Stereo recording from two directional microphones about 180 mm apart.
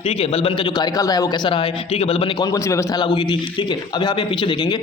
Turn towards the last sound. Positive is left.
turn(degrees=25)  # may be behind; listen again after turning